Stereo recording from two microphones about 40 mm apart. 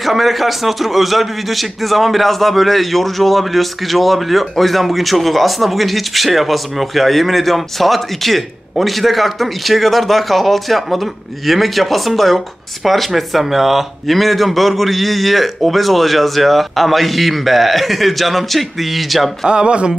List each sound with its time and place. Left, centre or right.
0.0 s a man's voice: centre
19.4 s speech: right